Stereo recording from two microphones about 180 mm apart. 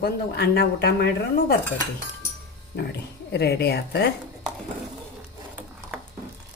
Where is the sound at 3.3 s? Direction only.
65° left (ahead or behind).